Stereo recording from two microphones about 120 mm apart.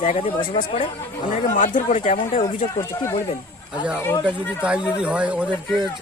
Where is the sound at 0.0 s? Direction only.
75° left (ahead or behind).